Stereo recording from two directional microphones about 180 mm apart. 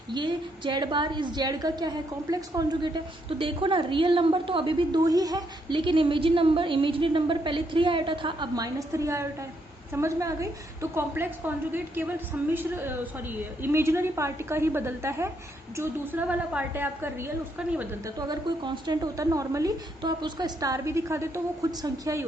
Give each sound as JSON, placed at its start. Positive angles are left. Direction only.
{"t": 0.1, "sound": "a woman's voice", "side_deg": -25}
{"t": 18.0, "sound": "a woman's voice", "side_deg": -20}